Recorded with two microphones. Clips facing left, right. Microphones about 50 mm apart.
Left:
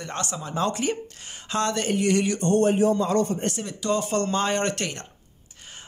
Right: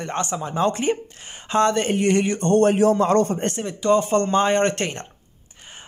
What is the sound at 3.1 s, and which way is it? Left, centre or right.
Speech, right.